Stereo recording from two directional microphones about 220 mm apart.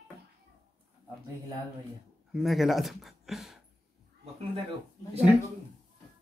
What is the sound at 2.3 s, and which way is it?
A woman's voice, centre (ahead or behind).